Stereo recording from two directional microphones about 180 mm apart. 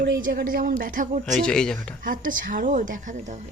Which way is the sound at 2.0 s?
50° right (ahead or behind).